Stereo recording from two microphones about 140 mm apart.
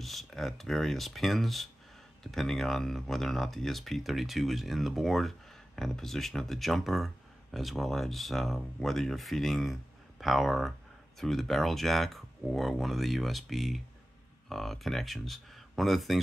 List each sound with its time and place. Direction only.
0.0 s speech: centre (ahead or behind)